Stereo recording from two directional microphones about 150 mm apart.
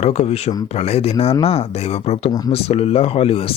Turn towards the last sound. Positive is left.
turn(degrees=40)  # may be behind; listen again after turning